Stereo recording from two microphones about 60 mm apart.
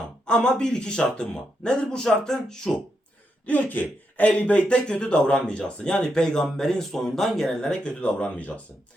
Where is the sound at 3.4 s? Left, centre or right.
Left.